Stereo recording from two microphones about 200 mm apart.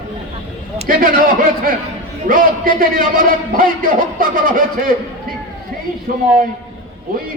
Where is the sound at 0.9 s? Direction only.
45° right (ahead or behind).